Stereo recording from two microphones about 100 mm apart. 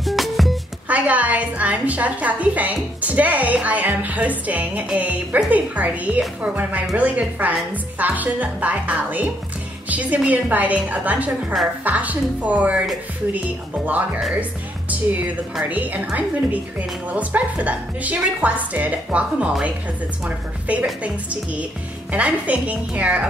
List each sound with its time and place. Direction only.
0.0 s music: centre (ahead or behind)
0.8 s a woman's voice: 15° right (ahead or behind)
13.8 s a woman's voice: 15° right (ahead or behind)
15.7 s a woman's voice: 15° right (ahead or behind)